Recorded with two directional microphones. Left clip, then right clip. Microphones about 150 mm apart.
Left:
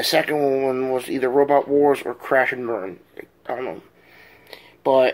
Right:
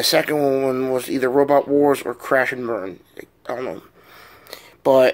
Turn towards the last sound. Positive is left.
turn(degrees=-40)  # may be behind; listen again after turning